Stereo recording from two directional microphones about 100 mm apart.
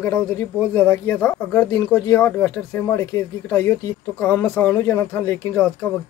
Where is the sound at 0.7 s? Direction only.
15° left (ahead or behind).